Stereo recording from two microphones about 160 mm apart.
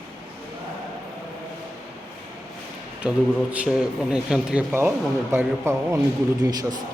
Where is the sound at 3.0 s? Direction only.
10° right (ahead or behind).